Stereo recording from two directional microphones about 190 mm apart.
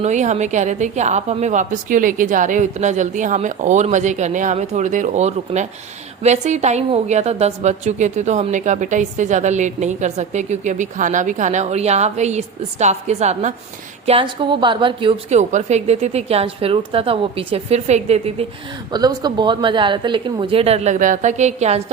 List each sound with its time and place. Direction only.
0.0 s a woman's voice: 40° right (ahead or behind)
18.9 s speech: 20° right (ahead or behind); by 21.8 s 35° right (ahead or behind)